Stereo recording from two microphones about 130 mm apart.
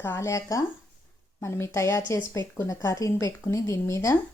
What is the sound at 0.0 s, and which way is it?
A woman's voice, 20° left (ahead or behind).